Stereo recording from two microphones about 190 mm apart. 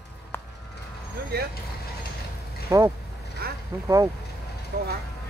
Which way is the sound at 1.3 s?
60° right (ahead or behind).